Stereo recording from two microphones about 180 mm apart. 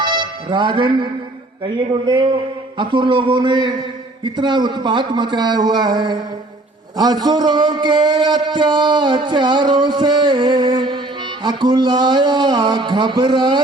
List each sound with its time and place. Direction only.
0.0 s music: 25° right (ahead or behind)
1.9 s a man's voice: 25° right (ahead or behind)